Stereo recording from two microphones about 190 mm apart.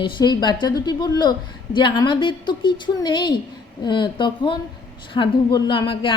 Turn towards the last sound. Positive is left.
turn(degrees=25)  # may be behind; listen again after turning